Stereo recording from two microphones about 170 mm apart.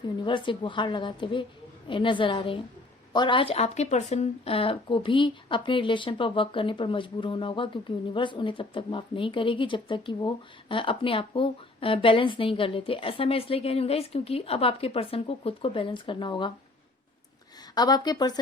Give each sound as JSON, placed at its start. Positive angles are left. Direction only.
{"t": 0.3, "sound": "a woman's voice", "side_deg": 30}
{"t": 17.7, "sound": "a woman's voice", "side_deg": 25}